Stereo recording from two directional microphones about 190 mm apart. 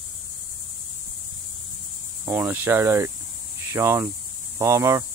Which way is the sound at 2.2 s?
10° right (ahead or behind).